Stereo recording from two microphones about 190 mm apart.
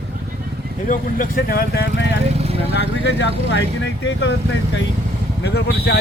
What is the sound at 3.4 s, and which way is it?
A man's voice, 65° left (ahead or behind).